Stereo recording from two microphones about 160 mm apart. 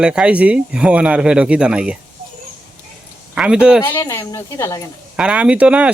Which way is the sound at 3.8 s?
15° left (ahead or behind).